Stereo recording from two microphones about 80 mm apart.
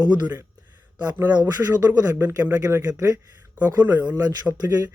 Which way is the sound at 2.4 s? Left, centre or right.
Right.